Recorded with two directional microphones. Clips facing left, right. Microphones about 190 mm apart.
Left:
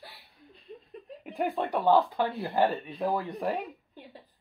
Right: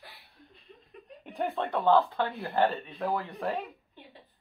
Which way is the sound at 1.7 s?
15° left (ahead or behind).